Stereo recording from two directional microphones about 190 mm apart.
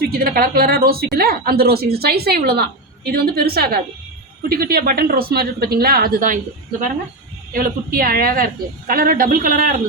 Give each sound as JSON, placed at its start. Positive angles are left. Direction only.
{"t": 0.0, "sound": "a woman's voice", "side_deg": -55}